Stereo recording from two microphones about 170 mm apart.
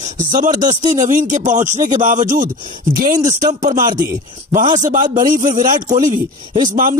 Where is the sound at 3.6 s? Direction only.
50° right (ahead or behind).